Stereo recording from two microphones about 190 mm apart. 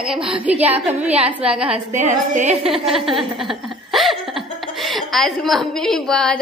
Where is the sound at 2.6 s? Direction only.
Centre (ahead or behind).